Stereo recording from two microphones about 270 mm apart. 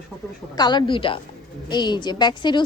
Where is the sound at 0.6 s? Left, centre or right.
Centre.